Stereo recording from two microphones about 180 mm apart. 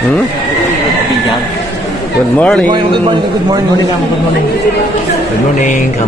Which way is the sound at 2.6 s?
25° right (ahead or behind).